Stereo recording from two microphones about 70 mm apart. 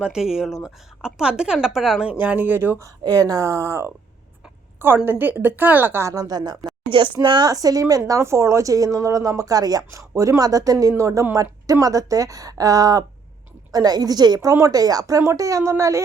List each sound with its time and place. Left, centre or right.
0.0 s a woman's voice: centre
2.1 s speech: right
3.0 s speech: right
5.0 s speech: right
6.1 s a woman's voice: right
7.3 s speech: right
9.9 s a woman's voice: right
14.5 s speech: right